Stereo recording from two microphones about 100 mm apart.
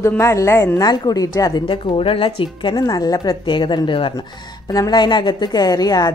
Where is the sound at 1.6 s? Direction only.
60° left (ahead or behind).